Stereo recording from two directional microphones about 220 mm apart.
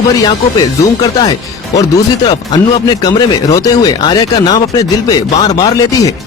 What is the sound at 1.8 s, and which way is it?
Speech, 15° left (ahead or behind).